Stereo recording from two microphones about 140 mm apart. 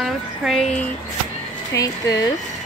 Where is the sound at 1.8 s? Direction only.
25° left (ahead or behind).